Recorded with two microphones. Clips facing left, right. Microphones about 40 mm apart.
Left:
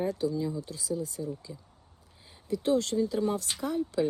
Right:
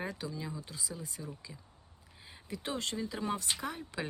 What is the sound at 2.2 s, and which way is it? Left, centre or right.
Speech, right.